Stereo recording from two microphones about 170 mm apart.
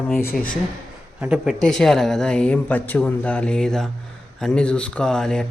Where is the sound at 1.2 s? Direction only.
5° right (ahead or behind).